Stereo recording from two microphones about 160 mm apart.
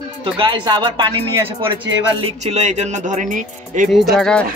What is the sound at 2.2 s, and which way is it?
Speech, 45° right (ahead or behind).